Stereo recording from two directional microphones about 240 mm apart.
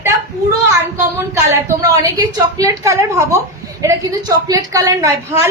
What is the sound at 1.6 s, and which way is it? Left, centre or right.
A woman's voice, centre.